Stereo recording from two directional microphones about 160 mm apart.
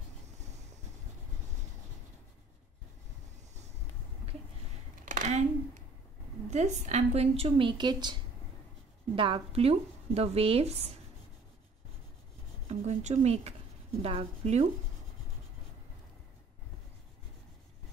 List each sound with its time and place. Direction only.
5.0 s a sound: 55° right (ahead or behind)
6.5 s speech: 45° right (ahead or behind)
12.6 s speech: 45° right (ahead or behind)